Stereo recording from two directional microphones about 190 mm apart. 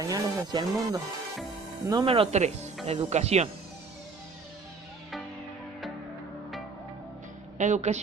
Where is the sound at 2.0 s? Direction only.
30° right (ahead or behind).